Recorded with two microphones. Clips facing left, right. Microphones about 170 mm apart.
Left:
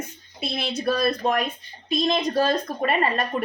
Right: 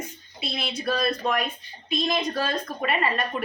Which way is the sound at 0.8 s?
40° left (ahead or behind).